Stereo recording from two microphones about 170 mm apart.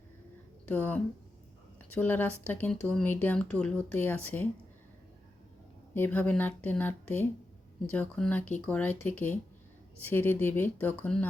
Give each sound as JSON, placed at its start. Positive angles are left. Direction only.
{"t": 0.6, "sound": "speech", "side_deg": 10}
{"t": 5.9, "sound": "speech", "side_deg": 10}